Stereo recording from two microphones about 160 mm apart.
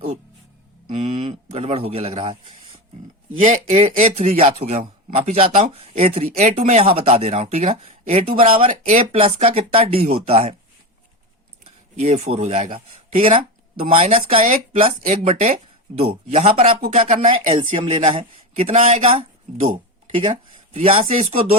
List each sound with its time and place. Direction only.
0.9 s speech: 50° right (ahead or behind)
1.2 s a sound: 35° right (ahead or behind)
3.4 s speech: 45° right (ahead or behind)
8.7 s speech: 45° right (ahead or behind)
11.9 s speech: 40° right (ahead or behind)
20.7 s speech: 40° right (ahead or behind)